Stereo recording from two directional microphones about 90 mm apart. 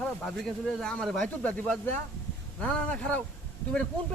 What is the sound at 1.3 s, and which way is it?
Speech, 15° left (ahead or behind).